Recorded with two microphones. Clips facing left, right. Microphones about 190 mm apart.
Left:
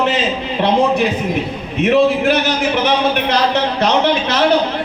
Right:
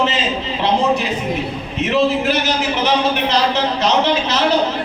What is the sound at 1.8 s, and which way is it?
A man's voice, 55° left (ahead or behind).